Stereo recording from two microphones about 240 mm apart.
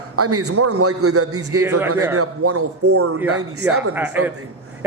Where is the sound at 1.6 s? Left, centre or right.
Centre.